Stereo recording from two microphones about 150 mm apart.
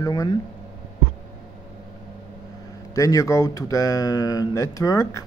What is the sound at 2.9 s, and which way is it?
Speech, 20° left (ahead or behind).